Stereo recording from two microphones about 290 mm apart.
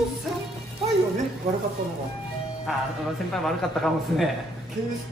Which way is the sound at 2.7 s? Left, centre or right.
Centre.